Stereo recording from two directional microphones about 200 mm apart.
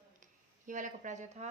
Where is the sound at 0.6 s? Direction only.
40° right (ahead or behind).